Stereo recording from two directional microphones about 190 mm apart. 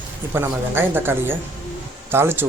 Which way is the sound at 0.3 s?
10° right (ahead or behind).